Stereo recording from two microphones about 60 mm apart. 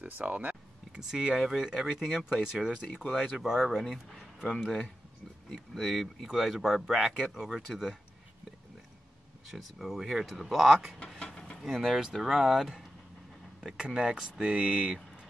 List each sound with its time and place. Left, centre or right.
0.1 s speech: right
0.9 s speech: centre
5.8 s speech: centre
9.5 s speech: centre
11.0 s vehicle: centre
11.6 s speech: centre
13.7 s speech: centre